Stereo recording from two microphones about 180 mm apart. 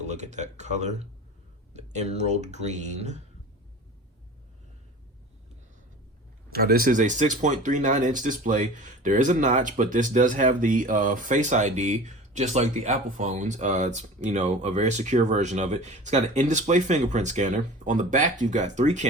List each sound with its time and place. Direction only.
0.0 s speech: 40° right (ahead or behind)
6.5 s speech: 60° right (ahead or behind); by 19.0 s 40° right (ahead or behind)